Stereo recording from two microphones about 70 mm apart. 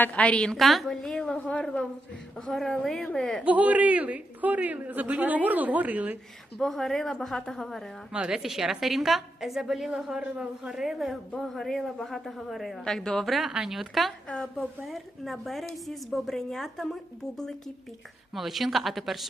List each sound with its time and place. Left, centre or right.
0.0 s a woman's voice: centre
0.5 s speech: centre
2.5 s a woman's voice: centre
3.4 s a man's voice: right
6.6 s speech: centre
8.1 s speech: centre